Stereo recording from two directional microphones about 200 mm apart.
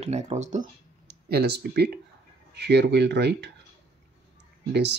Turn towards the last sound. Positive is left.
turn(degrees=-60)  # may be behind; listen again after turning